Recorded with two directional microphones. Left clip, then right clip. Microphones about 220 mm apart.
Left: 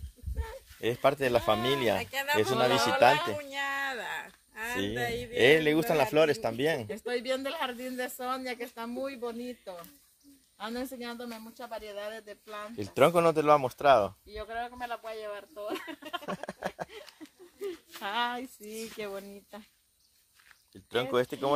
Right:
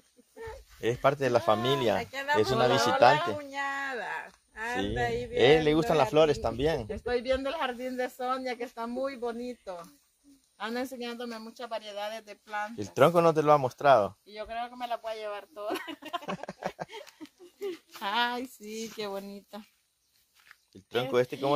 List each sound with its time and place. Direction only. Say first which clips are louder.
0.7 s speech: even; 5° left (ahead or behind)
2.0 s speech: right 1 dB; 25° left (ahead or behind)
2.5 s speech: right 1 dB; 5° left (ahead or behind)
3.3 s a sound: even; 25° left (ahead or behind)
4.8 s speech: right 2 dB; 10° left (ahead or behind); by 12.7 s 40° right (ahead or behind)
12.7 s speech: right 1 dB; 5° left (ahead or behind)
14.5 s speech: right 2 dB; 40° right (ahead or behind)
16.3 s a sound: even; centre (ahead or behind)
17.6 s speech: right 2 dB; 50° right (ahead or behind)
20.7 s speech: right 1 dB; centre (ahead or behind)